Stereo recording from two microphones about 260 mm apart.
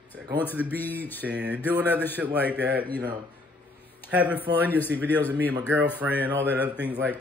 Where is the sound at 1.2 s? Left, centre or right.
Centre.